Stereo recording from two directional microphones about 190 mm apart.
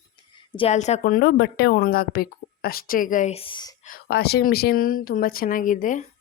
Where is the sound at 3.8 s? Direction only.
55° left (ahead or behind).